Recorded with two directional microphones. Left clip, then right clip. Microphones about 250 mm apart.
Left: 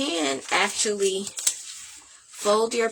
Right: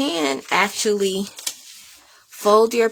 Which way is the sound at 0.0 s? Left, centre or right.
Right.